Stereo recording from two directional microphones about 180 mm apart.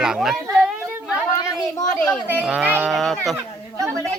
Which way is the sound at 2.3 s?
5° right (ahead or behind).